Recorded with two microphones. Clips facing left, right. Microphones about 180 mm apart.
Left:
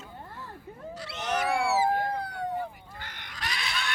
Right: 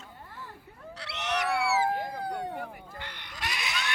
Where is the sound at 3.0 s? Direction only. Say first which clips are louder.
Right 1 dB; 45° left (ahead or behind).